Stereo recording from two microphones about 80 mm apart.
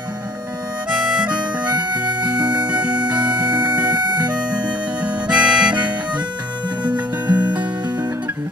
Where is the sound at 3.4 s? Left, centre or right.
Right.